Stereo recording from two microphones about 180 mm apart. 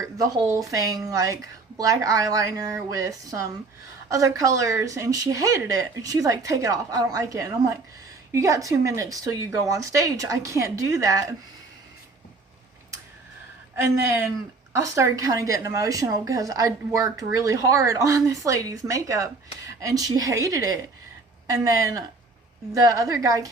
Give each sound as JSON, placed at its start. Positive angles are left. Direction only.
{"t": 0.0, "sound": "speech", "side_deg": -20}
{"t": 13.7, "sound": "speech", "side_deg": -15}